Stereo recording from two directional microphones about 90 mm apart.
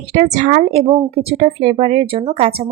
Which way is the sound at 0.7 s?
90° right.